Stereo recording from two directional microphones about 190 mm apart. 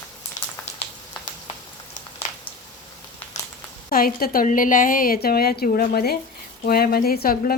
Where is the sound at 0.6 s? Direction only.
35° left (ahead or behind).